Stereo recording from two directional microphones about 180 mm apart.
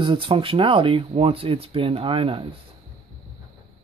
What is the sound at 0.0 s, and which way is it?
Speech, 30° right (ahead or behind).